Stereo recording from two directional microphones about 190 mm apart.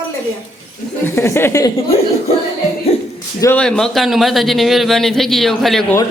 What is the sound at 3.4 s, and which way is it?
Speech, 10° left (ahead or behind).